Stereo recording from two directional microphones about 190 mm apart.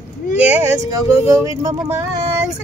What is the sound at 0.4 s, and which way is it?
Speech, 10° right (ahead or behind).